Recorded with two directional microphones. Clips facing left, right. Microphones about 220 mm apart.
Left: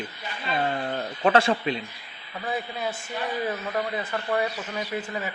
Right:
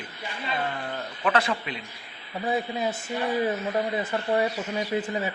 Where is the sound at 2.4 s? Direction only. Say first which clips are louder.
Right 4 dB; 25° right (ahead or behind).